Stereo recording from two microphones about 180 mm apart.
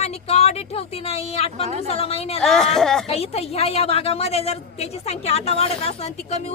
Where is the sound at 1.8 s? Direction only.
35° left (ahead or behind).